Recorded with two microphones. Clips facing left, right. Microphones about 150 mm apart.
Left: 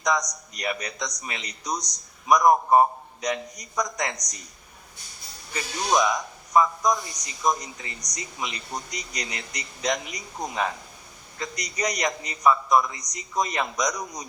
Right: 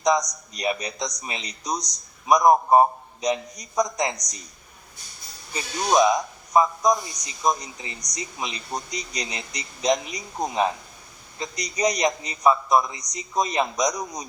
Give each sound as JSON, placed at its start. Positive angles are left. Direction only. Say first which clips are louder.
{"t": 0.0, "sound": "a man's voice", "louder": "right 4 dB", "side_deg": -20}
{"t": 5.5, "sound": "a man's voice", "louder": "right 3 dB", "side_deg": -20}